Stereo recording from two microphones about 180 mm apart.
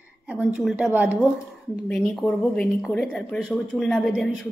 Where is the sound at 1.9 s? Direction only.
5° left (ahead or behind).